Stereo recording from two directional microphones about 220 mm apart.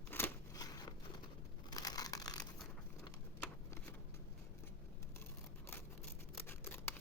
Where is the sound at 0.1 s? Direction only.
15° left (ahead or behind).